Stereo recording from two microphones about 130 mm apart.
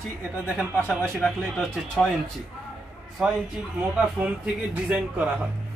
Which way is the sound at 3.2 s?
5° right (ahead or behind).